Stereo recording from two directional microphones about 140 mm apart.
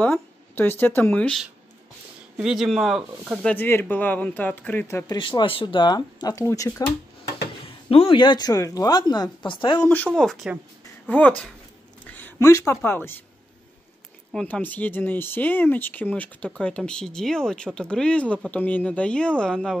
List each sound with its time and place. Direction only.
0.0 s speech: 10° left (ahead or behind)
2.3 s speech: 5° right (ahead or behind)
3.4 s speech: 15° left (ahead or behind)
5.0 s speech: 35° left (ahead or behind)
7.9 s speech: 40° left (ahead or behind)
9.8 s speech: 10° left (ahead or behind)
14.3 s speech: 10° left (ahead or behind)